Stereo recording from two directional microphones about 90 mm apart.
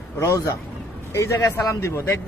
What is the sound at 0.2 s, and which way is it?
A man's voice, 35° left (ahead or behind).